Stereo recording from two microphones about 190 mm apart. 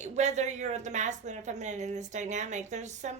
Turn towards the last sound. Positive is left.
turn(degrees=-40)  # may be behind; listen again after turning